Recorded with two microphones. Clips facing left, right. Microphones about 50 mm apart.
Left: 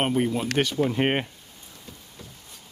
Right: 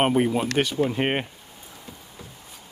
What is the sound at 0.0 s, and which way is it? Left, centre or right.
Speech, centre.